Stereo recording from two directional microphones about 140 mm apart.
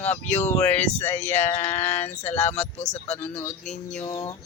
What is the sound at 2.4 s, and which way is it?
Speech, 50° left (ahead or behind).